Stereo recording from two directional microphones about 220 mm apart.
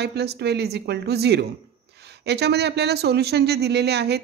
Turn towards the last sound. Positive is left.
turn(degrees=-50)  # may be behind; listen again after turning